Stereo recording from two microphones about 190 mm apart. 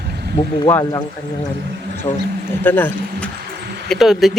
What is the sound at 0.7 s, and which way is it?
Speech, 20° left (ahead or behind).